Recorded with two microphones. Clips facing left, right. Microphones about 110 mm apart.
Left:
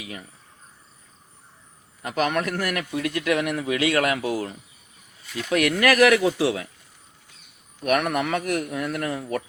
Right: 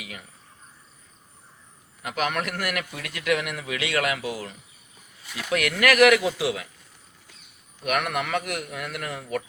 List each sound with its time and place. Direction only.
2.0 s a man's voice: 35° left (ahead or behind)
5.5 s a man's voice: 35° left (ahead or behind)
7.9 s a man's voice: 35° left (ahead or behind)